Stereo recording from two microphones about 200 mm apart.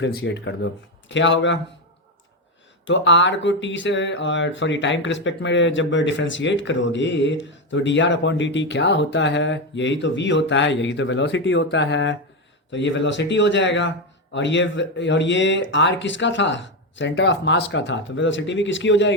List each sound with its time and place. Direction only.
0.0 s speech: 60° left (ahead or behind)
2.8 s speech: 65° left (ahead or behind)